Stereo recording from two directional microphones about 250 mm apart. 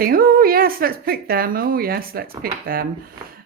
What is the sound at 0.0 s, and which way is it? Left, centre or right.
A woman's voice, right.